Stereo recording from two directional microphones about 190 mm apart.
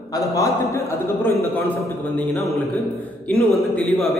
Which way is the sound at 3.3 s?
Centre (ahead or behind).